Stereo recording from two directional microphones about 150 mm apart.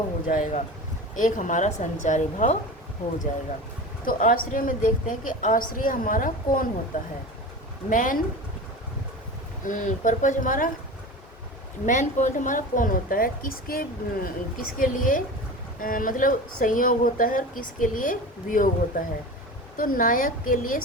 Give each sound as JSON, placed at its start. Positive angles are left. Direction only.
{"t": 0.3, "sound": "a woman's voice", "side_deg": 60}
{"t": 4.0, "sound": "a woman's voice", "side_deg": 70}
{"t": 9.6, "sound": "a woman's voice", "side_deg": 60}
{"t": 11.9, "sound": "a woman's voice", "side_deg": 55}